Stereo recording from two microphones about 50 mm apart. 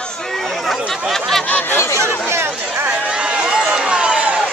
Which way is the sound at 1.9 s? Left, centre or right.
Right.